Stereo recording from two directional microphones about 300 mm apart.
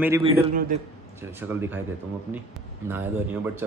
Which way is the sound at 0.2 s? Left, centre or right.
Right.